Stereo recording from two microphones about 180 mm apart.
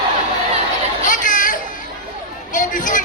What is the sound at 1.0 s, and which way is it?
Chatter, 45° left (ahead or behind).